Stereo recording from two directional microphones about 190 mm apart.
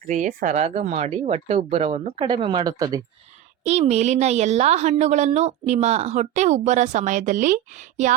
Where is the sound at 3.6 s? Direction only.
35° right (ahead or behind).